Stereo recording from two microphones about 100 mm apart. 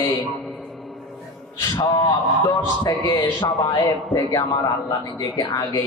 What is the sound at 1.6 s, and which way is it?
A man's voice, 35° left (ahead or behind).